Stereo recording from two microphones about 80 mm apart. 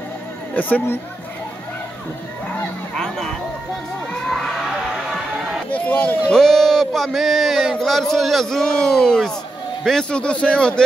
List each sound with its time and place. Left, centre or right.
0.6 s speech: left
3.0 s a man's voice: centre
4.3 s crowd: centre
5.7 s speech: centre
6.3 s a man's voice: centre